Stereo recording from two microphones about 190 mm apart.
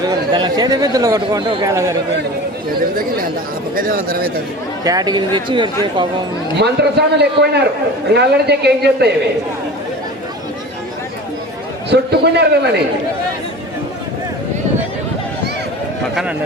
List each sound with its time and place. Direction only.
0.1 s speech: 20° right (ahead or behind)
3.8 s speech: 50° right (ahead or behind)
4.8 s speech: 20° right (ahead or behind)
6.6 s a man's voice: 60° right (ahead or behind)
11.9 s a man's voice: 60° right (ahead or behind)